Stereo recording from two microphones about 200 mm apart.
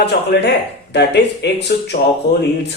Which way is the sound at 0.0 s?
55° left (ahead or behind).